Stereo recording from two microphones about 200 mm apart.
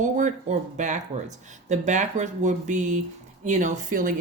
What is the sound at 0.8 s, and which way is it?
A woman's voice, 40° right (ahead or behind).